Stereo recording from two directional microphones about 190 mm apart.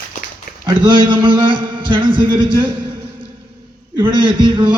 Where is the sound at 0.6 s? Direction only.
25° right (ahead or behind).